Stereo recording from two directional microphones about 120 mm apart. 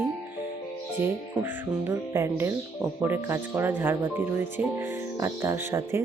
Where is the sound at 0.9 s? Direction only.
20° right (ahead or behind).